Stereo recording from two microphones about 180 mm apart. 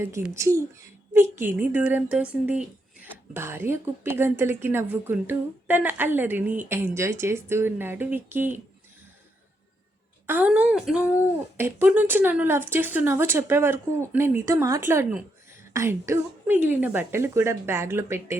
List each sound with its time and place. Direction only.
0.0 s speech: 15° right (ahead or behind)
10.2 s speech: 10° right (ahead or behind)